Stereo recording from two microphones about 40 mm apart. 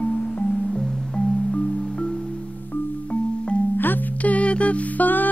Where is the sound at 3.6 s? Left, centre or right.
Left.